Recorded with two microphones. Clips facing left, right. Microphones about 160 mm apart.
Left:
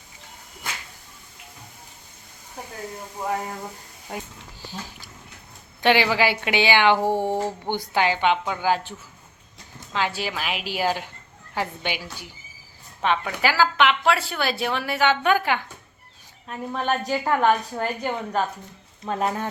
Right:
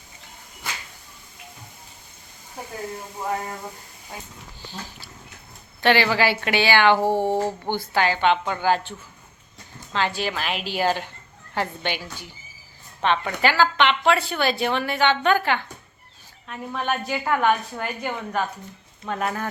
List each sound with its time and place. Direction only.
5.8 s a woman's voice: 15° left (ahead or behind)
6.9 s speech: 10° right (ahead or behind)
7.7 s a woman's voice: 15° left (ahead or behind)
16.5 s a woman's voice: 35° left (ahead or behind)